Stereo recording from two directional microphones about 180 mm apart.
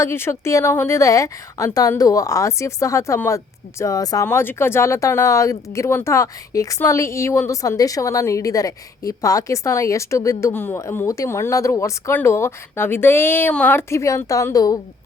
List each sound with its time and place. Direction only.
0.0 s a woman's voice: 15° left (ahead or behind)